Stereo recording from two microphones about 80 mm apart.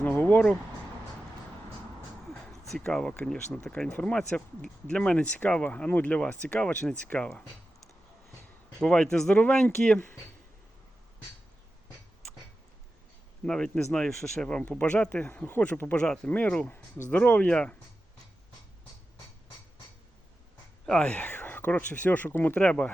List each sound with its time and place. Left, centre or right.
0.0 s a sound: left
2.5 s speech: centre
8.8 s speech: centre
13.4 s speech: centre
20.8 s speech: centre